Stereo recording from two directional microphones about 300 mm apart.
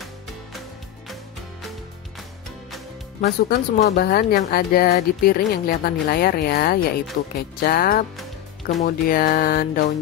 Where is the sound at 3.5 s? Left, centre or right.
Left.